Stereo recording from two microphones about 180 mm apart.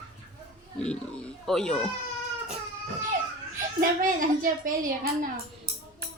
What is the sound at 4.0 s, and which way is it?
A woman's voice, 50° right (ahead or behind).